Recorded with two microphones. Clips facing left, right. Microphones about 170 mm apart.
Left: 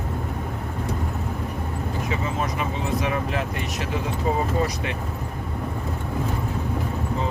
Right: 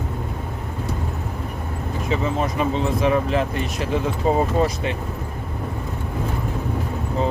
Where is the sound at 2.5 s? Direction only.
30° right (ahead or behind).